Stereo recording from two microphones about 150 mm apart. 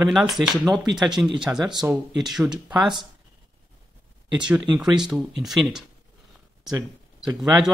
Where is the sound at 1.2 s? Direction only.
15° right (ahead or behind).